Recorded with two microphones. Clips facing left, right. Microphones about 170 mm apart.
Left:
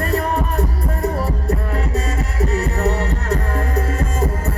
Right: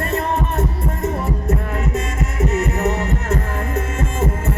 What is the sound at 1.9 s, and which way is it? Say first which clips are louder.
Music: even; 35° left (ahead or behind).